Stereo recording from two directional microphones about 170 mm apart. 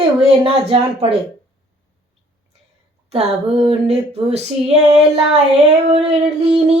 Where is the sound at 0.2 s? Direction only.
35° right (ahead or behind).